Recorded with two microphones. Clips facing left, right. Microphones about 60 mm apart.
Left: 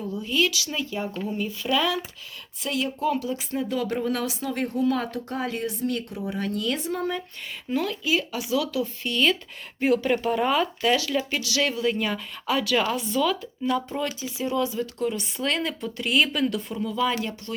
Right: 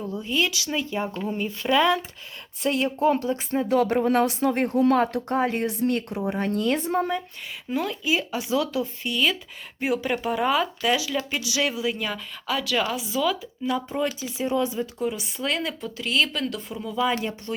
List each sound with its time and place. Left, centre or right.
0.0 s speech: right
2.6 s speech: right
3.7 s a woman's voice: right
3.9 s speech: right
4.3 s a woman's voice: right
6.4 s speech: right
7.7 s speech: centre
8.0 s speech: right
9.0 s speech: centre
11.3 s speech: centre
14.2 s speech: right
14.9 s speech: centre
16.8 s speech: centre